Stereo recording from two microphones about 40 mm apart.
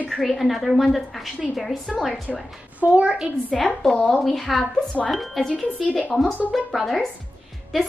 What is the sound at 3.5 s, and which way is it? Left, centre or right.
A woman's voice, centre.